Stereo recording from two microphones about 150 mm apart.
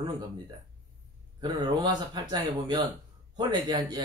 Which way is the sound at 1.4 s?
25° right (ahead or behind).